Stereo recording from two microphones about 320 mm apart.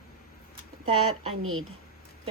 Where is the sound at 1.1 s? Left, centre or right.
Right.